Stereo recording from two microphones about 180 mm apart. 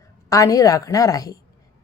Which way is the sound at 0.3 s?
20° left (ahead or behind).